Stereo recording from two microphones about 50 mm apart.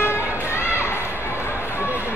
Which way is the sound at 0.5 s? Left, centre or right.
Left.